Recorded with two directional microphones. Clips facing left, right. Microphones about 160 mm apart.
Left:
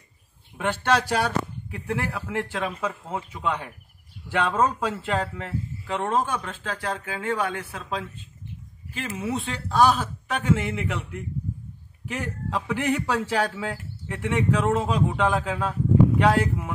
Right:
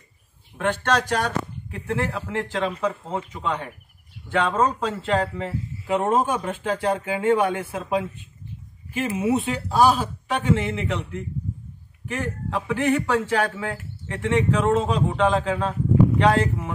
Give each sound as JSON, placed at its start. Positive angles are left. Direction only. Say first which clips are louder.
{"t": 0.6, "sound": "speech", "louder": "right 1 dB", "side_deg": 10}
{"t": 5.9, "sound": "speech", "louder": "right 4 dB", "side_deg": -15}